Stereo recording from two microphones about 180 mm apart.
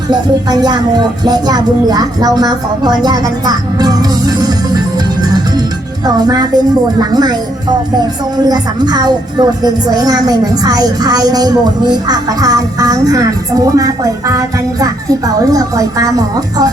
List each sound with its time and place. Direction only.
0.1 s a woman's voice: 25° right (ahead or behind)
6.1 s a woman's voice: 20° right (ahead or behind)
8.4 s a woman's voice: 20° right (ahead or behind)